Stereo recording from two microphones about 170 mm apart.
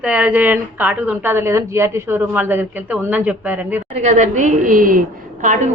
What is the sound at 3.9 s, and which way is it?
A woman's voice, 45° right (ahead or behind).